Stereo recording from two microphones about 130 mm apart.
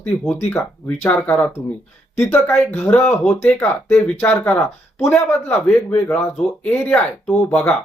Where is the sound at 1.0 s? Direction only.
10° left (ahead or behind).